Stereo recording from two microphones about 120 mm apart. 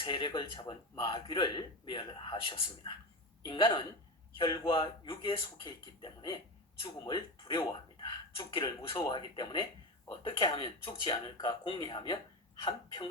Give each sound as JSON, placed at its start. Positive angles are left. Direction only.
{"t": 0.0, "sound": "speech", "side_deg": 40}